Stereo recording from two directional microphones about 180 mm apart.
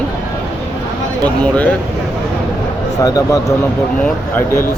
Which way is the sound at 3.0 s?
20° left (ahead or behind).